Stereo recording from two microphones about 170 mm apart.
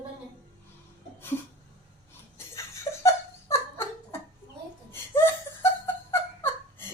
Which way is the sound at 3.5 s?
15° left (ahead or behind).